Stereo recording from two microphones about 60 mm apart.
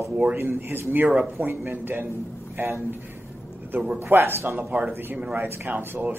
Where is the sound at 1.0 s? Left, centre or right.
Right.